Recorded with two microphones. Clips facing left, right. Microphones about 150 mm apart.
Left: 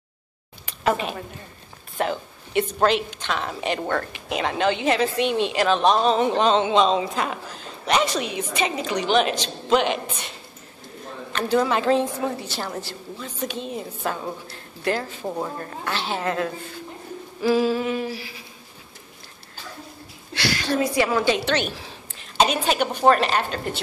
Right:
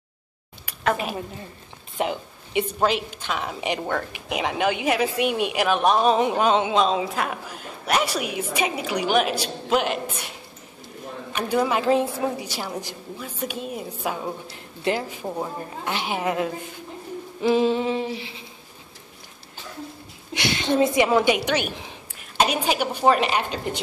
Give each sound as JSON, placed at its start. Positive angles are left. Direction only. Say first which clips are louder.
{"t": 2.0, "sound": "speech", "louder": "left 1 dB", "side_deg": -15}
{"t": 11.3, "sound": "speech", "louder": "left 1 dB", "side_deg": -10}
{"t": 14.5, "sound": "speech", "louder": "even", "side_deg": -20}
{"t": 15.2, "sound": "a woman's voice", "louder": "left 3 dB", "side_deg": 0}
{"t": 15.6, "sound": "speech", "louder": "even", "side_deg": -15}
{"t": 17.4, "sound": "humming", "louder": "even", "side_deg": -20}
{"t": 20.3, "sound": "a woman's voice", "louder": "right 2 dB", "side_deg": -20}